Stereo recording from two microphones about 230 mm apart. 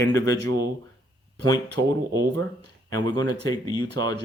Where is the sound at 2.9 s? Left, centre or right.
Centre.